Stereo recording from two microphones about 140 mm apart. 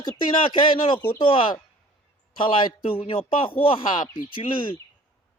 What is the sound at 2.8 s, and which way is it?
A man's voice, 40° left (ahead or behind).